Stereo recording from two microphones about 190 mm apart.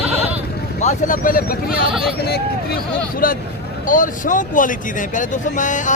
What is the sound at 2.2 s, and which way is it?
Speech, 55° left (ahead or behind).